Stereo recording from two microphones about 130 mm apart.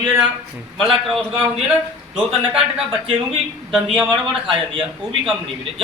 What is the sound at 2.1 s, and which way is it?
A man's voice, 10° right (ahead or behind).